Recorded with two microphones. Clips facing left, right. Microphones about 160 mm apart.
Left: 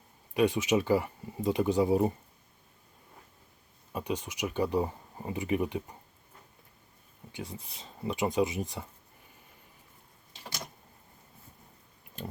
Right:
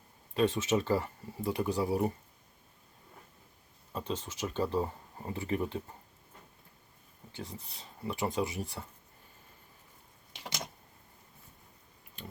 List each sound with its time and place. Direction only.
0.3 s speech: 15° left (ahead or behind)
3.9 s speech: 15° left (ahead or behind)
7.3 s speech: 15° left (ahead or behind)